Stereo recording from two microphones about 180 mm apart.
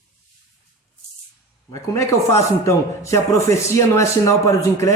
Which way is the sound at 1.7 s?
15° left (ahead or behind).